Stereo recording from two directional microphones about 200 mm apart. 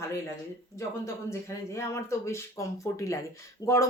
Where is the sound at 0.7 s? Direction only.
15° left (ahead or behind).